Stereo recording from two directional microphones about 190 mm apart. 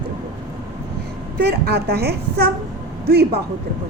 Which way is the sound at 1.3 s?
55° right (ahead or behind).